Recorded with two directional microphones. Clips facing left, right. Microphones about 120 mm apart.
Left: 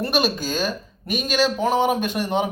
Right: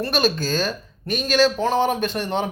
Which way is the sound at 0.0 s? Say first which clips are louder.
Right 1 dB; 15° left (ahead or behind).